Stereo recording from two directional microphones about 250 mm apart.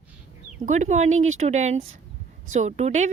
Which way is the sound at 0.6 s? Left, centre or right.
Right.